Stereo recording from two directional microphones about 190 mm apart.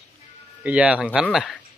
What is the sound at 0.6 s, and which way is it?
Speech, 5° right (ahead or behind).